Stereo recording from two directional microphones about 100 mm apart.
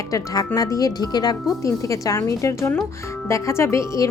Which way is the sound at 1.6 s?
30° left (ahead or behind).